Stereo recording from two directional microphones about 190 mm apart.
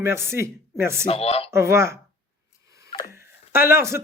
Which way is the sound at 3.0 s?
15° right (ahead or behind).